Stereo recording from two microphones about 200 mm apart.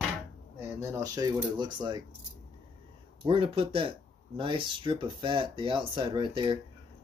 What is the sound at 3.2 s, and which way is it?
Speech, 25° right (ahead or behind).